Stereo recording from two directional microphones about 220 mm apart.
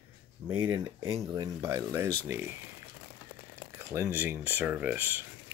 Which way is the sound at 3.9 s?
10° right (ahead or behind).